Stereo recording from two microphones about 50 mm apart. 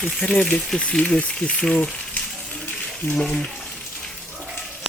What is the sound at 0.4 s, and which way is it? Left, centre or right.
Speech, centre.